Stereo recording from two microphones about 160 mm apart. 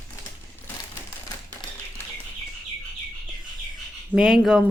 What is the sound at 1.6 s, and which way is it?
Tap, 25° left (ahead or behind).